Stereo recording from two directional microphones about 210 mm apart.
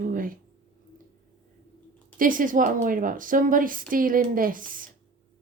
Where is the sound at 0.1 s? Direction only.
40° right (ahead or behind).